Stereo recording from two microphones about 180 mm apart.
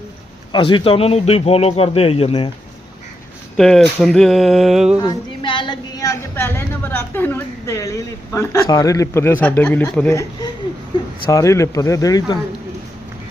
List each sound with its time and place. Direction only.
0.5 s speech: 30° left (ahead or behind)
3.6 s a sound: centre (ahead or behind)
4.9 s a woman's voice: 25° left (ahead or behind)